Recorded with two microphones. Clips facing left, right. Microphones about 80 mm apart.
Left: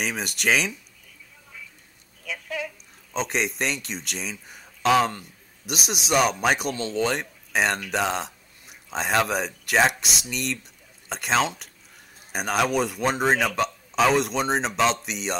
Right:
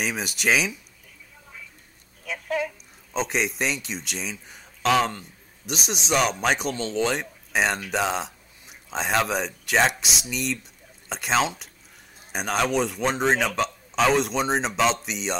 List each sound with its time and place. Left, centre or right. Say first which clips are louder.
0.0 s speech: even; centre
2.2 s speech: right 4 dB; right
3.1 s a man's voice: right 1 dB; centre